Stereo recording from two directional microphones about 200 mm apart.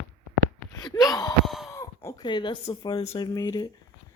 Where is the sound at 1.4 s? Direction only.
Centre (ahead or behind).